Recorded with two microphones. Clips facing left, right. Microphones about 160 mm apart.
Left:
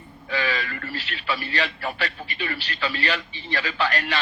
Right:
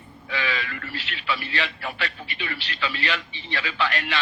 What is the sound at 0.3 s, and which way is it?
A man's voice, 40° left (ahead or behind).